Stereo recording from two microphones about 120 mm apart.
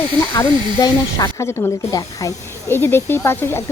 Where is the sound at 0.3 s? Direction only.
30° left (ahead or behind).